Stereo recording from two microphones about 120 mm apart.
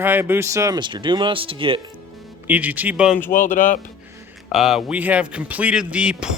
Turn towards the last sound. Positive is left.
turn(degrees=-10)  # may be behind; listen again after turning